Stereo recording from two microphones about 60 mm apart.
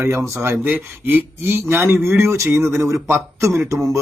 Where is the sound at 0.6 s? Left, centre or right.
Right.